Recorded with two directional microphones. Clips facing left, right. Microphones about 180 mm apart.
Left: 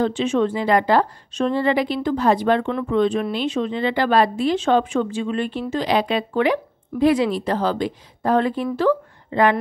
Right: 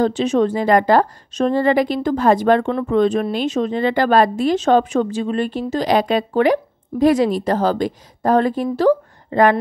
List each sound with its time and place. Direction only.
0.0 s a woman's voice: 40° right (ahead or behind)